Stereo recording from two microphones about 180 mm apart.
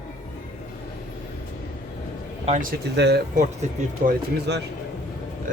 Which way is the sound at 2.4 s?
40° right (ahead or behind).